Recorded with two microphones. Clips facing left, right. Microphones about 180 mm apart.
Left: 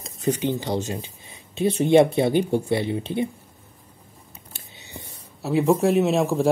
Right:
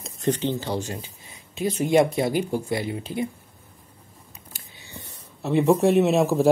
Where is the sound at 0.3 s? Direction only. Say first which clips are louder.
Left 1 dB; 15° left (ahead or behind).